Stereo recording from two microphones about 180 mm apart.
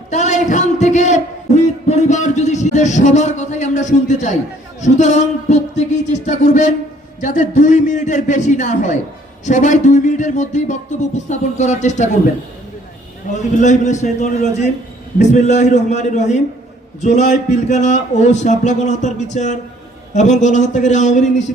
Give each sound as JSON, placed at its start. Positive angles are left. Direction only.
{"t": 0.1, "sound": "a man's voice", "side_deg": 40}
{"t": 13.3, "sound": "a man's voice", "side_deg": 40}